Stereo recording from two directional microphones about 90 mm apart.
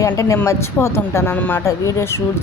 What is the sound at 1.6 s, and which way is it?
Speech, 30° left (ahead or behind).